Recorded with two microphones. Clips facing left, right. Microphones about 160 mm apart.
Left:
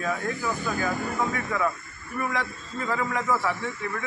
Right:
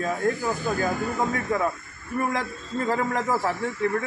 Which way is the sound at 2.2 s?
40° right (ahead or behind).